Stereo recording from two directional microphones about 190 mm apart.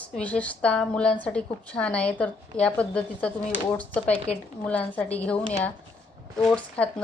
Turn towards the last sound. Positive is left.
turn(degrees=5)  # may be behind; listen again after turning